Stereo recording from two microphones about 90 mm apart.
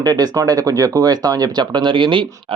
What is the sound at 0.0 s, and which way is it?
Speech, 45° right (ahead or behind).